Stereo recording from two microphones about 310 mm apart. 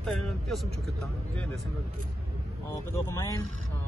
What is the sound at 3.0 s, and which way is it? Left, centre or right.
Speech, centre.